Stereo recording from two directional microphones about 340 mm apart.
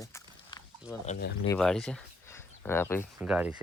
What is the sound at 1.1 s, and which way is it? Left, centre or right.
Speech, left.